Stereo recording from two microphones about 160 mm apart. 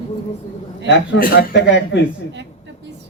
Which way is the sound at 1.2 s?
80° left.